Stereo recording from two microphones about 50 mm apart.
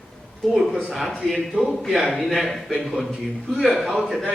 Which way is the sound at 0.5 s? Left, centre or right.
Centre.